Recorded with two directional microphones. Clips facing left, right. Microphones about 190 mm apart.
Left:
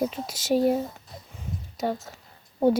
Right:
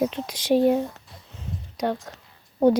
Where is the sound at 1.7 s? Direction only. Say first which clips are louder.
Right 2 dB; 5° left (ahead or behind).